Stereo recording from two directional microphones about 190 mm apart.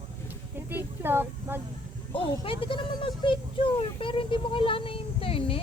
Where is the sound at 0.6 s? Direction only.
10° right (ahead or behind).